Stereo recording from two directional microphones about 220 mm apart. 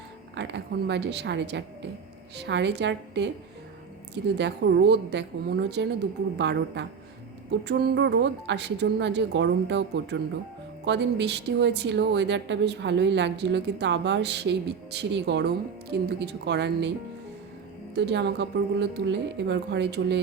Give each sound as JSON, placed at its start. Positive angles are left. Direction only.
{"t": 0.3, "sound": "a woman's voice", "side_deg": -50}
{"t": 17.9, "sound": "a woman's voice", "side_deg": -50}